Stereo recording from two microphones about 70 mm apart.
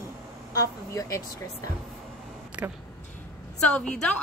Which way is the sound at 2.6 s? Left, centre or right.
Right.